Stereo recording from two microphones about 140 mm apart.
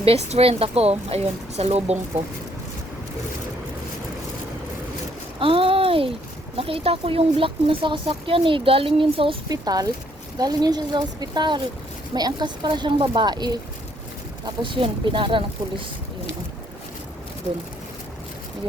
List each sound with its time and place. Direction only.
0.0 s speech: 45° right (ahead or behind)
5.4 s a sound: 40° right (ahead or behind)
6.6 s speech: 40° right (ahead or behind)
9.5 s a woman's voice: 25° right (ahead or behind)